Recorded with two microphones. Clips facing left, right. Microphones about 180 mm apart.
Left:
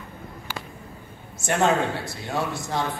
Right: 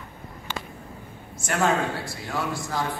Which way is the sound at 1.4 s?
25° left (ahead or behind).